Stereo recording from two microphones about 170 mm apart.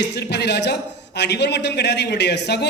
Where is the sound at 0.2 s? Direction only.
80° left.